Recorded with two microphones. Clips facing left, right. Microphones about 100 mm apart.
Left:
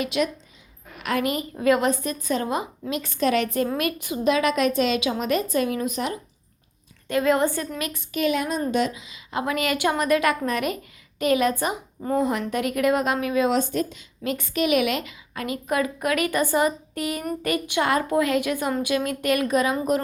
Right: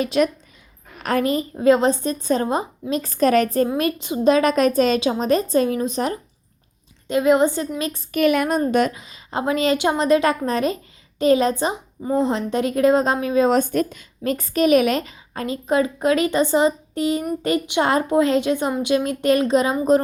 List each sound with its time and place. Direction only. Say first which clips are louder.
0.0 s a woman's voice: right 5 dB; 35° right (ahead or behind)
3.8 s a woman's voice: right 4 dB; 25° right (ahead or behind)
7.1 s speech: right 4 dB; 20° right (ahead or behind)
8.1 s a woman's voice: right 6 dB; 55° right (ahead or behind); by 9.4 s 40° right (ahead or behind)
9.4 s speech: right 4 dB; 25° right (ahead or behind)
13.5 s a woman's voice: right 4 dB; 50° right (ahead or behind); by 19.7 s 25° right (ahead or behind)